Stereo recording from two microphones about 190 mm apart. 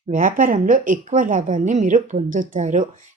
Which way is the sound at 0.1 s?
45° right (ahead or behind).